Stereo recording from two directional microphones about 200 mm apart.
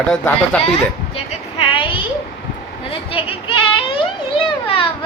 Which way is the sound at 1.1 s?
25° left (ahead or behind).